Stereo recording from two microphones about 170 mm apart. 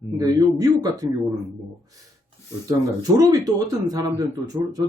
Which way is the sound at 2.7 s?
20° right (ahead or behind).